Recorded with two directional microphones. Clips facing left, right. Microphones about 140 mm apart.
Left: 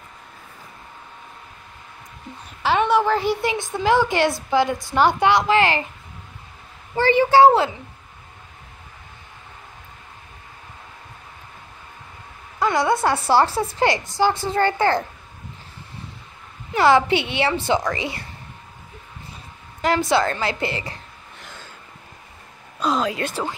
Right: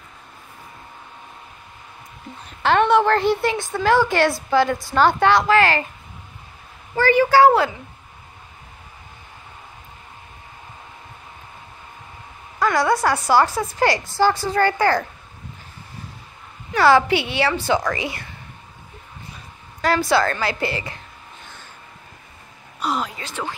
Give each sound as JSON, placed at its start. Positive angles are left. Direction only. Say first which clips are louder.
{"t": 2.6, "sound": "a woman's voice", "louder": "right 2 dB", "side_deg": 5}
{"t": 7.0, "sound": "a woman's voice", "louder": "even", "side_deg": 25}
{"t": 12.5, "sound": "a woman's voice", "louder": "right 1 dB", "side_deg": 20}
{"t": 16.7, "sound": "a woman's voice", "louder": "right 1 dB", "side_deg": 25}
{"t": 19.8, "sound": "a woman's voice", "louder": "right 1 dB", "side_deg": 20}
{"t": 23.2, "sound": "speech", "louder": "left 9 dB", "side_deg": 60}